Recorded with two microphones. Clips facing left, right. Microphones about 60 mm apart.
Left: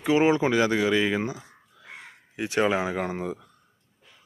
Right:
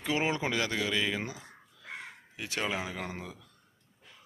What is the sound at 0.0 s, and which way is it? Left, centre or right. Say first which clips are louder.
Speech: left 10 dB; centre.